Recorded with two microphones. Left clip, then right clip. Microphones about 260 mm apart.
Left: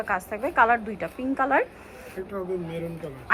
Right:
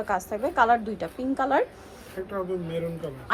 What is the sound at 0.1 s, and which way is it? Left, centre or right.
A woman's voice, centre.